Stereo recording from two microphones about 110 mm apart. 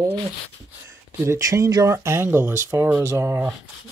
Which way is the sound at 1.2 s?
30° right (ahead or behind).